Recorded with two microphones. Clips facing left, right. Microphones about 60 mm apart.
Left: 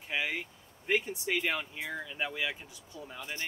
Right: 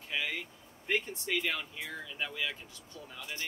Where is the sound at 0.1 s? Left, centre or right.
Centre.